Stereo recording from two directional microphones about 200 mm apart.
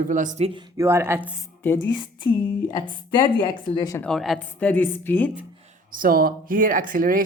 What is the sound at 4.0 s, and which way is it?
A woman's voice, centre (ahead or behind).